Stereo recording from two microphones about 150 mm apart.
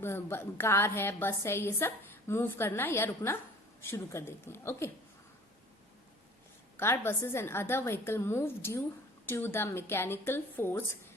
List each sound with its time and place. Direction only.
0.0 s a woman's voice: 15° left (ahead or behind)
6.7 s a woman's voice: 15° left (ahead or behind)